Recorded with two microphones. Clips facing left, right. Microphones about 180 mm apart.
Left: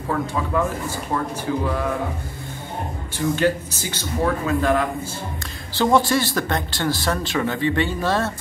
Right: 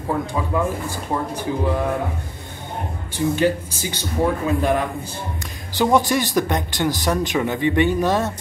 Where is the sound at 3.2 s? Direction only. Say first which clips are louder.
Right 1 dB; 15° right (ahead or behind).